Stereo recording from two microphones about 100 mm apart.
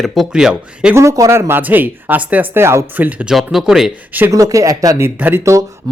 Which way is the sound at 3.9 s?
15° right (ahead or behind).